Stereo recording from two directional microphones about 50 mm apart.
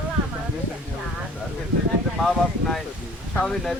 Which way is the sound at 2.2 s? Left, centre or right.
Centre.